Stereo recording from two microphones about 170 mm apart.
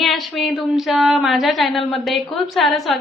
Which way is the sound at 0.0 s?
Centre (ahead or behind).